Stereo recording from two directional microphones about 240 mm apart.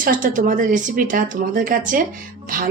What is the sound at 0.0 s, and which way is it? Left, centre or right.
Speech, right.